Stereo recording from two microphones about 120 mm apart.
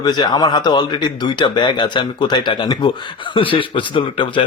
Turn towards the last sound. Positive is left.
turn(degrees=45)  # may be behind; listen again after turning